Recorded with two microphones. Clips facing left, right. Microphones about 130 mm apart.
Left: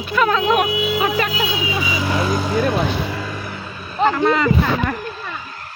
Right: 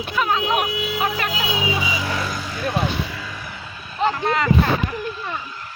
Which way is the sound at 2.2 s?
60° left (ahead or behind).